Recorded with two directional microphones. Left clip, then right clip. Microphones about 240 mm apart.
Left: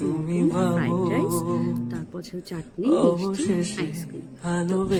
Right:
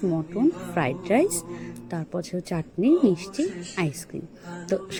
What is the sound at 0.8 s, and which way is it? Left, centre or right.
Speech, right.